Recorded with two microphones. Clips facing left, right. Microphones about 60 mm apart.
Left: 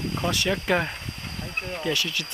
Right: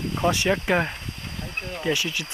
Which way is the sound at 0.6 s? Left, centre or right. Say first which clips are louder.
Right 1 dB; centre.